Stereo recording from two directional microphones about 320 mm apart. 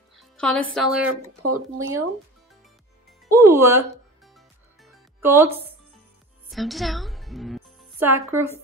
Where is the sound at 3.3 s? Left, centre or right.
Centre.